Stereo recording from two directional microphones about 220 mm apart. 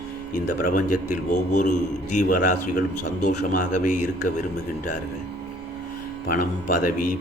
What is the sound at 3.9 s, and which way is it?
Speech, 90° left.